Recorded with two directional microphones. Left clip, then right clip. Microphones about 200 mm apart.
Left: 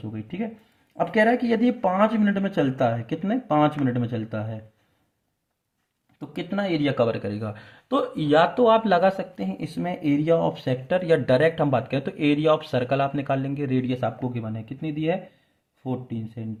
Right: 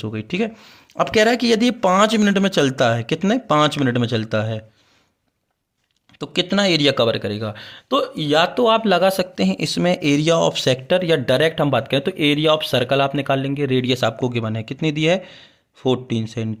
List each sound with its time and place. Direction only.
0.0 s speech: 60° right (ahead or behind)
6.1 s speech: 60° right (ahead or behind); by 9.1 s 30° right (ahead or behind)
9.1 s speech: 60° right (ahead or behind)
10.8 s speech: 35° right (ahead or behind); by 16.5 s 55° right (ahead or behind)